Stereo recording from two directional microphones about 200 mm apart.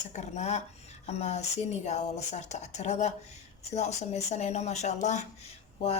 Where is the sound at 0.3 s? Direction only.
35° left (ahead or behind).